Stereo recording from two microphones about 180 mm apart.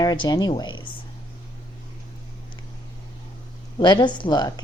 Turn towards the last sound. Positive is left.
turn(degrees=20)  # may be behind; listen again after turning